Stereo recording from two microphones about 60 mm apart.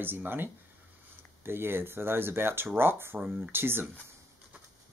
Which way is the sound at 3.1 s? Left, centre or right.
Right.